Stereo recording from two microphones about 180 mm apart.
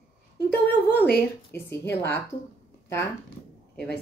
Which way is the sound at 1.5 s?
15° left (ahead or behind).